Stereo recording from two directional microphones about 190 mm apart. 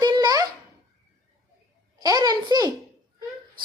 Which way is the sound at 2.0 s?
20° right (ahead or behind).